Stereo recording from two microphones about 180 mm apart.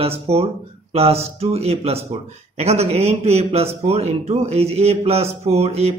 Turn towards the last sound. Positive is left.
turn(degrees=-35)  # may be behind; listen again after turning